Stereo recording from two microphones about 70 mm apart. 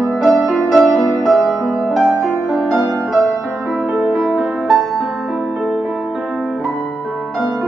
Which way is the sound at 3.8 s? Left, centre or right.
Centre.